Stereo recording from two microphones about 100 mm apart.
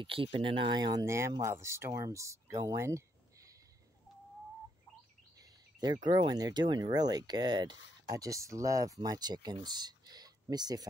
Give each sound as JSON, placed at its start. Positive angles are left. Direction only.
{"t": 0.0, "sound": "speech", "side_deg": -65}
{"t": 1.0, "sound": "speech", "side_deg": -30}
{"t": 5.8, "sound": "speech", "side_deg": -45}
{"t": 8.1, "sound": "speech", "side_deg": -35}